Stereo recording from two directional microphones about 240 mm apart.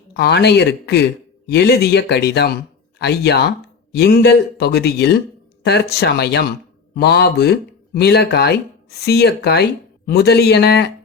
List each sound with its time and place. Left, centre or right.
0.2 s speech: left